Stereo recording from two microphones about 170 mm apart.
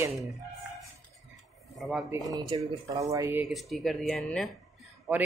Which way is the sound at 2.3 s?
20° right (ahead or behind).